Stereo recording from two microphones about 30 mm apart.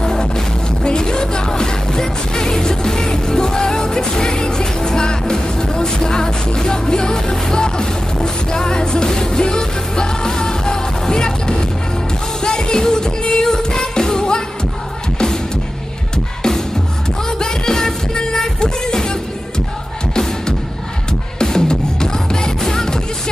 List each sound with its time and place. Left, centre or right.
0.0 s music: left
17.3 s music: left
21.4 s music: left